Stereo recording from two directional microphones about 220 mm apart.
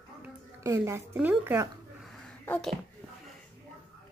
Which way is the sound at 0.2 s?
10° right (ahead or behind).